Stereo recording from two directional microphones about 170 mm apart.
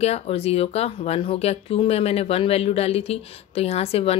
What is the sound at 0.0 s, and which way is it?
Speech, 35° left (ahead or behind).